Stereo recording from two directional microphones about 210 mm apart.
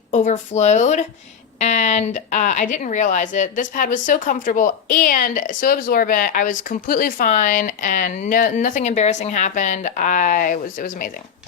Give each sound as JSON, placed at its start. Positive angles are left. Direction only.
{"t": 0.1, "sound": "speech", "side_deg": 35}